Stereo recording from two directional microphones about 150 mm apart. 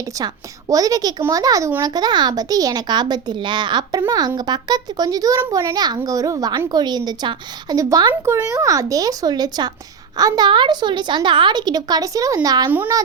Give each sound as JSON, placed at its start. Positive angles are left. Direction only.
{"t": 0.7, "sound": "a child's voice", "side_deg": -25}